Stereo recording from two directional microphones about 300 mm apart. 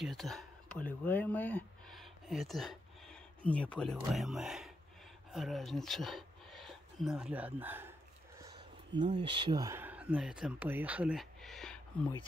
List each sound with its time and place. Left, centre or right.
0.0 s speech: centre